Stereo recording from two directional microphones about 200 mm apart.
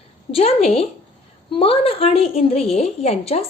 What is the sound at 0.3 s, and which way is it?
A woman's voice, 30° left (ahead or behind).